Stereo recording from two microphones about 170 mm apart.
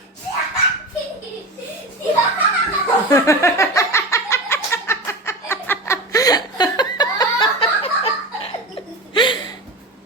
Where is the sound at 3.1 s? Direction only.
15° left (ahead or behind).